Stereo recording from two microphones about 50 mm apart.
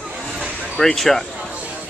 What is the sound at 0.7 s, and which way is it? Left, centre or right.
Speech, centre.